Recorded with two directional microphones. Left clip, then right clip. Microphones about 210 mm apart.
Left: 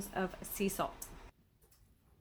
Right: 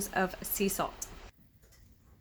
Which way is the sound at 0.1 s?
10° right (ahead or behind).